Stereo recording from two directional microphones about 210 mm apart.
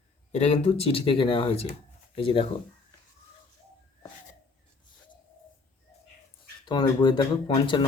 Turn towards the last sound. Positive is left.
turn(degrees=25)  # may be behind; listen again after turning